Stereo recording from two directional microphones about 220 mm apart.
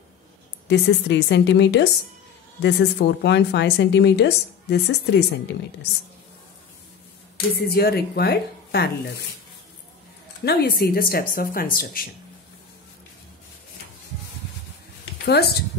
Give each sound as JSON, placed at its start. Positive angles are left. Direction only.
{"t": 0.7, "sound": "a woman's voice", "side_deg": 50}
{"t": 7.5, "sound": "a woman's voice", "side_deg": 45}
{"t": 10.4, "sound": "a woman's voice", "side_deg": 45}
{"t": 15.2, "sound": "a woman's voice", "side_deg": 45}